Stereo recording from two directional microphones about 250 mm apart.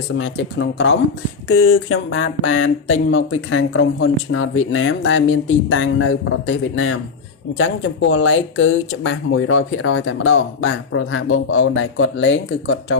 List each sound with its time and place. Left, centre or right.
0.2 s speech: left